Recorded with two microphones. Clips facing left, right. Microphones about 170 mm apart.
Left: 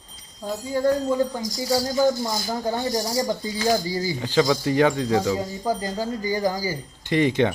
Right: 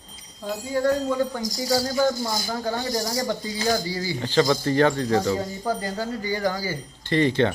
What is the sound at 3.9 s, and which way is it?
Speech, 40° left (ahead or behind).